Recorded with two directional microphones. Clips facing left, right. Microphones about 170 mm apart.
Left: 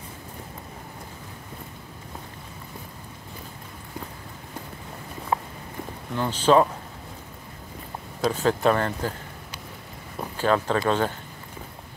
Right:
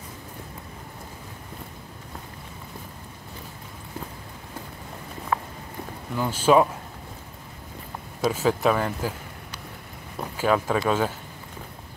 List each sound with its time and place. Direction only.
5.3 s walk: 25° left (ahead or behind)
6.1 s speech: 10° right (ahead or behind)
8.2 s speech: 5° right (ahead or behind)
10.3 s speech: 10° right (ahead or behind)